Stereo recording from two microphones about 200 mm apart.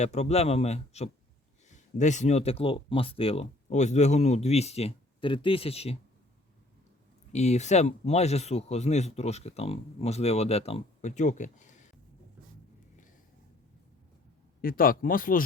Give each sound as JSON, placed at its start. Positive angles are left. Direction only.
{"t": 0.0, "sound": "speech", "side_deg": 35}
{"t": 7.3, "sound": "speech", "side_deg": 35}
{"t": 14.6, "sound": "speech", "side_deg": 45}